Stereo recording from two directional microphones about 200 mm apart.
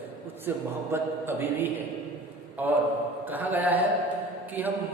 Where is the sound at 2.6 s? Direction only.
10° right (ahead or behind).